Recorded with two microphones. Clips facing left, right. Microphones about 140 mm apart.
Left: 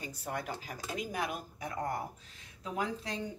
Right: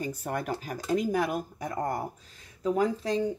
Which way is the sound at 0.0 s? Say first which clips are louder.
Right 7 dB; 50° right (ahead or behind).